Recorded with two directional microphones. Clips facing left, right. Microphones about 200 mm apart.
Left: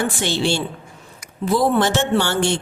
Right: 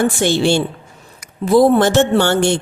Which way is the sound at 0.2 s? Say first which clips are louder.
Right 6 dB; 50° right (ahead or behind).